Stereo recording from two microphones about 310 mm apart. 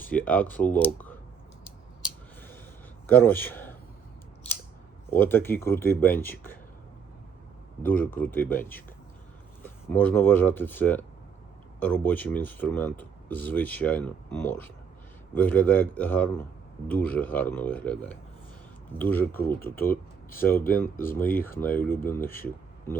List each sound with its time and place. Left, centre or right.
0.0 s speech: centre
3.1 s a man's voice: centre
5.2 s speech: centre
7.8 s speech: centre